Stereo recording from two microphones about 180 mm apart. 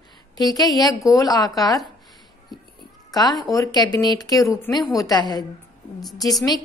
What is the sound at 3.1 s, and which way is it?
A woman's voice, 20° left (ahead or behind).